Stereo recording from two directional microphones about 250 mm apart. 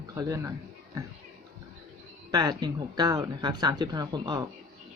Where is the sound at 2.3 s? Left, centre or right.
Centre.